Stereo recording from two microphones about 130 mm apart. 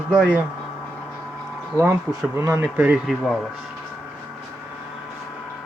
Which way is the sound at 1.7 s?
20° right (ahead or behind).